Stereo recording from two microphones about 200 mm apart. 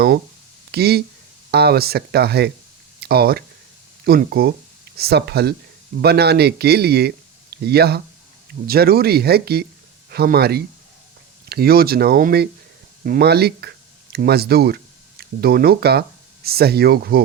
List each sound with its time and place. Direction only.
0.7 s speech: 50° right (ahead or behind)